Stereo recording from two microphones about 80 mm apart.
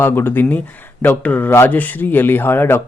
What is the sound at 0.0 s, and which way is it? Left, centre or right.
Speech, left.